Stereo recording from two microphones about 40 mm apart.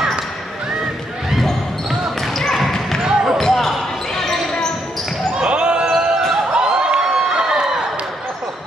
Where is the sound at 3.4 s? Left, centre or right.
Centre.